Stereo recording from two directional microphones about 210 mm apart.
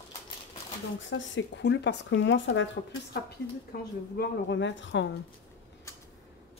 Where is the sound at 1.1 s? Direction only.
60° left (ahead or behind).